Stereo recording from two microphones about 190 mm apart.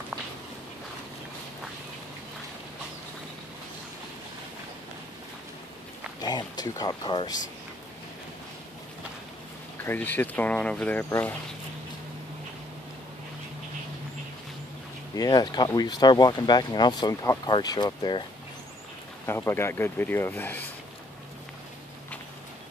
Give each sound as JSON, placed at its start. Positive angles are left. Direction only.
{"t": 6.2, "sound": "speech", "side_deg": 20}
{"t": 9.8, "sound": "speech", "side_deg": 10}
{"t": 15.1, "sound": "speech", "side_deg": 20}
{"t": 19.2, "sound": "speech", "side_deg": 10}